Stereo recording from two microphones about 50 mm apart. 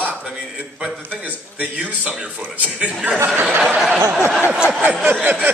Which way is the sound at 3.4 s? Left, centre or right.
Centre.